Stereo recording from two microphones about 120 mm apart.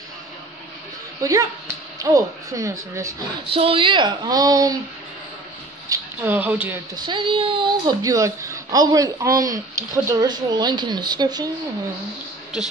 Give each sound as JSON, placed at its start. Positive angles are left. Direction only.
{"t": 1.2, "sound": "speech", "side_deg": -30}
{"t": 3.5, "sound": "speech", "side_deg": -50}
{"t": 5.9, "sound": "a sound", "side_deg": -30}
{"t": 6.2, "sound": "speech", "side_deg": -15}
{"t": 7.1, "sound": "speech", "side_deg": -45}
{"t": 8.0, "sound": "speech", "side_deg": -25}